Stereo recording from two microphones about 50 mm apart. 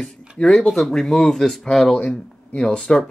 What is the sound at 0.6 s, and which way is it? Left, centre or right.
Speech, centre.